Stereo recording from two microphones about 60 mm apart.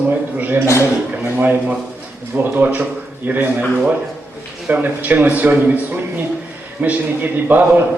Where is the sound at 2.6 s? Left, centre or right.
Right.